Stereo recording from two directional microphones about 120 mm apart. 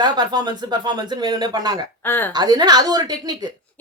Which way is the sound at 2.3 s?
35° right (ahead or behind).